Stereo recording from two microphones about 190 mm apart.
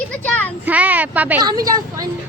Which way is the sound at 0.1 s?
10° left (ahead or behind).